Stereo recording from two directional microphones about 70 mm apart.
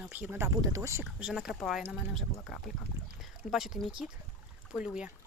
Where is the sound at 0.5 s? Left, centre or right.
Right.